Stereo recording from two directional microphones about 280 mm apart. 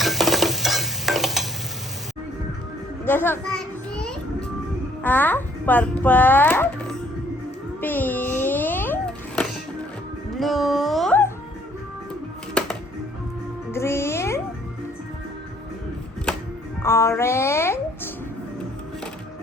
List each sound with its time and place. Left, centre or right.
0.0 s stir: centre
3.0 s children playing: centre
5.0 s a child's voice: centre
7.8 s music: centre
13.7 s music: centre
16.8 s music: centre